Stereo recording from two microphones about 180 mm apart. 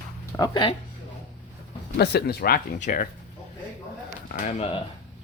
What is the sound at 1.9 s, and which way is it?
Speech, 65° left (ahead or behind).